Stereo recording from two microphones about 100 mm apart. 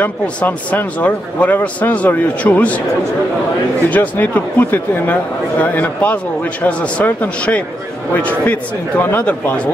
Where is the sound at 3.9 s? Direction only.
15° left (ahead or behind).